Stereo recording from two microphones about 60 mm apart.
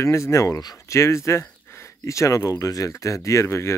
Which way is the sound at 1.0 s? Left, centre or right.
Left.